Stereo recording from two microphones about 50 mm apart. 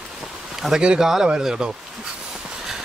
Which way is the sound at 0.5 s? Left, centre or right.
Centre.